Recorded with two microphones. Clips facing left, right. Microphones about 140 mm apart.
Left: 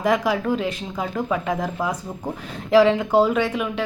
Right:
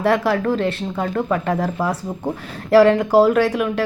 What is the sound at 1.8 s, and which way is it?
Speech, 5° right (ahead or behind).